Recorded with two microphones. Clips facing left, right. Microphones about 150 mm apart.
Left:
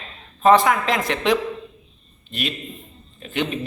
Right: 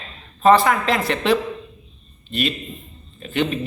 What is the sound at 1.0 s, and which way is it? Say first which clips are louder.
Speech: right 1 dB; 15° left (ahead or behind).